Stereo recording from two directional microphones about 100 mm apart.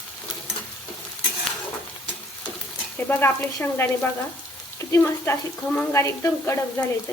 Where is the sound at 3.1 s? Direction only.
20° left (ahead or behind).